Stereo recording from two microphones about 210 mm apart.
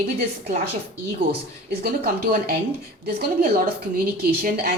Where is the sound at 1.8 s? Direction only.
45° right (ahead or behind).